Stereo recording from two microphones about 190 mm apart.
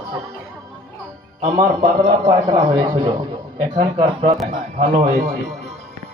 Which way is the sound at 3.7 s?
30° right (ahead or behind).